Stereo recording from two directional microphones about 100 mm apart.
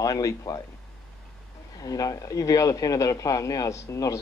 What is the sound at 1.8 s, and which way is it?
Speech, 40° left (ahead or behind).